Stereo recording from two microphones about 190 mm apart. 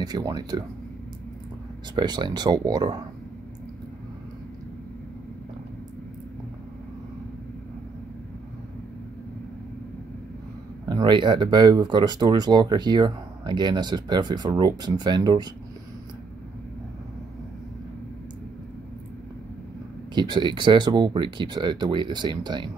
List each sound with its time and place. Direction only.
0.0 s speech: 20° right (ahead or behind)
2.0 s speech: 20° right (ahead or behind)
10.9 s speech: 25° right (ahead or behind)
20.2 s speech: 25° right (ahead or behind)